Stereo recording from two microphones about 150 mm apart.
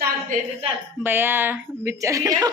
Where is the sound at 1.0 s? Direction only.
15° right (ahead or behind).